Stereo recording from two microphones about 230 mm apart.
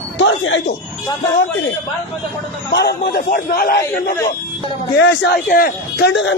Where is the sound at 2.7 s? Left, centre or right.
Left.